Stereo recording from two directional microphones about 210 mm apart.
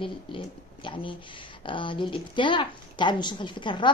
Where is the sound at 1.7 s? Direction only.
25° left (ahead or behind).